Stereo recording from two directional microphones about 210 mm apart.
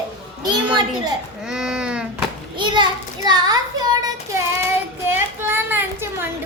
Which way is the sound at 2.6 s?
20° right (ahead or behind).